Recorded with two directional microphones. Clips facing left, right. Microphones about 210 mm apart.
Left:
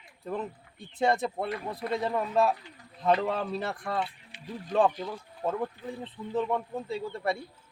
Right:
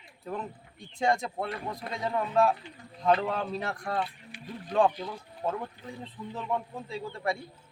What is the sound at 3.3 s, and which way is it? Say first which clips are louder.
Speech: left 1 dB; 5° left (ahead or behind).